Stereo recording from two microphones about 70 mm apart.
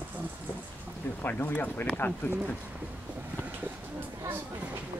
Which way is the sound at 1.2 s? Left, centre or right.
Left.